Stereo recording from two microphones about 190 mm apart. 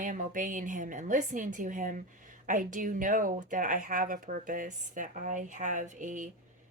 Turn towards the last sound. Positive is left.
turn(degrees=-40)  # may be behind; listen again after turning